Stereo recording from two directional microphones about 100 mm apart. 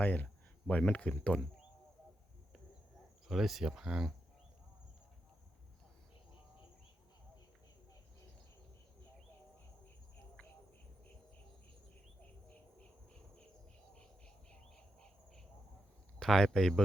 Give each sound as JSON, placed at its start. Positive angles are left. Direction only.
{"t": 0.0, "sound": "speech", "side_deg": 15}
{"t": 3.2, "sound": "speech", "side_deg": 0}
{"t": 13.9, "sound": "a sound", "side_deg": 10}
{"t": 16.2, "sound": "speech", "side_deg": 5}